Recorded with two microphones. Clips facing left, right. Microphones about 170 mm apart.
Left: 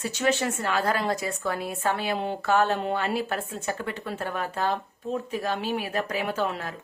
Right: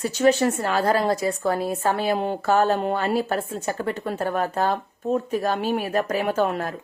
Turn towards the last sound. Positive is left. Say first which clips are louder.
# right 6 dB
turn(degrees=-50)  # may be behind; listen again after turning